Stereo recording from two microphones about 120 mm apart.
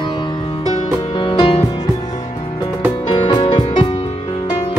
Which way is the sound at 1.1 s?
40° left (ahead or behind).